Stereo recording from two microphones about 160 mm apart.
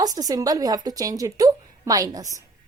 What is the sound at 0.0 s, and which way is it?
Speech, 25° right (ahead or behind).